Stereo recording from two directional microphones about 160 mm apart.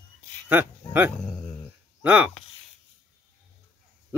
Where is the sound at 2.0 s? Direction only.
10° right (ahead or behind).